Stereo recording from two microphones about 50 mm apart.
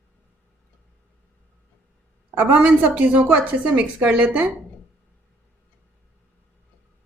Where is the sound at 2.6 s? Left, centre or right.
Right.